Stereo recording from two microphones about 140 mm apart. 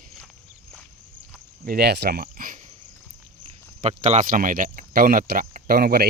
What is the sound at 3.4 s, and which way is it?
Cricket, 55° right (ahead or behind).